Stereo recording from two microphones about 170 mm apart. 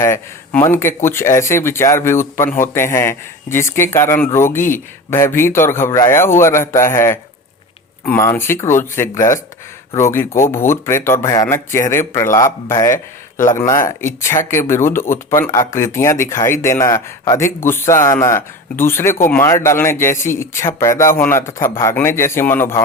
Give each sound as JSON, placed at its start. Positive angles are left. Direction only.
{"t": 0.0, "sound": "a man's voice", "side_deg": 15}
{"t": 12.9, "sound": "speech", "side_deg": 50}
{"t": 13.6, "sound": "a man's voice", "side_deg": 15}